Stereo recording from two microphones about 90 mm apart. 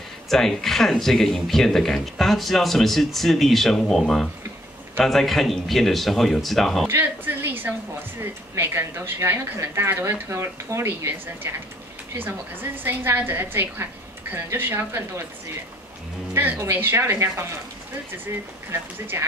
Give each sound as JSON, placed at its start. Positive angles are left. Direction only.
{"t": 0.3, "sound": "speech", "side_deg": 5}
{"t": 6.9, "sound": "speech", "side_deg": -25}
{"t": 16.3, "sound": "speech", "side_deg": -25}
{"t": 18.7, "sound": "speech", "side_deg": -30}